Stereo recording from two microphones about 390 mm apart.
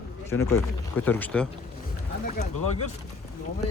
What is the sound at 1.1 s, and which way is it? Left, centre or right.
Speech, centre.